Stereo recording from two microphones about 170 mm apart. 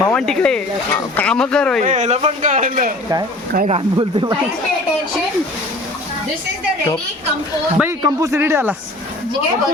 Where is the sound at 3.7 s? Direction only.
30° right (ahead or behind).